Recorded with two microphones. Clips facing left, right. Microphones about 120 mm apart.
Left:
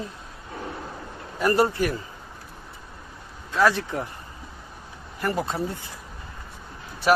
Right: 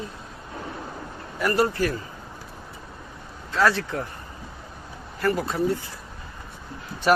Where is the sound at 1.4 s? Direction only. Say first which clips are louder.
Left 1 dB; 25° left (ahead or behind).